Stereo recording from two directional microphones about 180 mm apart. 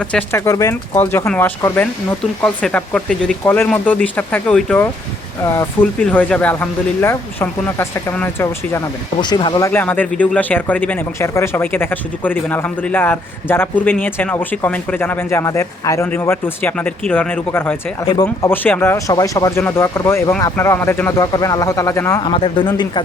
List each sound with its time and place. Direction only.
0.0 s speech: 5° left (ahead or behind)
5.4 s speech: 15° left (ahead or behind)
9.2 s speech: 25° left (ahead or behind)
18.0 s speech: 25° left (ahead or behind)
18.4 s speech: 10° left (ahead or behind)
22.2 s speech: 30° left (ahead or behind)